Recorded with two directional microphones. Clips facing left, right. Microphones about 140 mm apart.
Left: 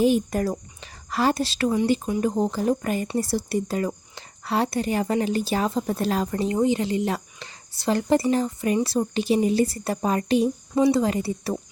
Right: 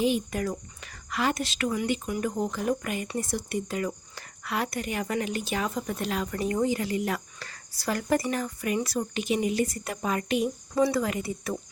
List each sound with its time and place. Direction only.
0.0 s speech: 40° left (ahead or behind)
6.3 s speech: 25° left (ahead or behind)